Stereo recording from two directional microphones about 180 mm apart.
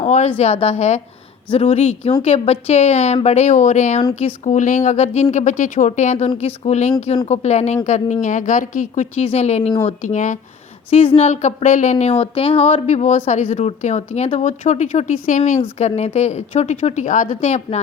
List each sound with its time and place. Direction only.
0.0 s speech: 40° left (ahead or behind)
10.9 s speech: 30° left (ahead or behind)